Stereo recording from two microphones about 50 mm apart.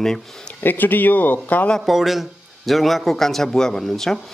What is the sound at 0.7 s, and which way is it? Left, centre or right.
Speech, left.